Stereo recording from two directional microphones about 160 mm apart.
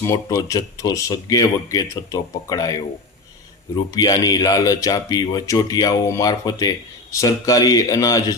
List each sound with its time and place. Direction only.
0.0 s speech: 20° left (ahead or behind)
3.9 s speech: 25° left (ahead or behind)